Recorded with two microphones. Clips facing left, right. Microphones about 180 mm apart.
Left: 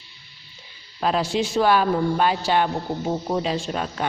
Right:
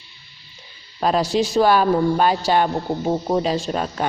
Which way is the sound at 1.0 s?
40° right (ahead or behind).